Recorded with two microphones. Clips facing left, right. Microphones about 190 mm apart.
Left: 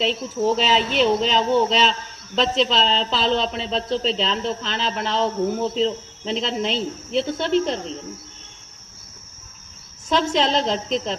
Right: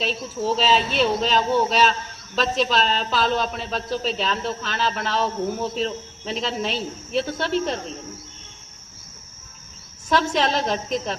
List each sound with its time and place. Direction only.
0.0 s speech: 20° left (ahead or behind)
10.1 s speech: 20° left (ahead or behind)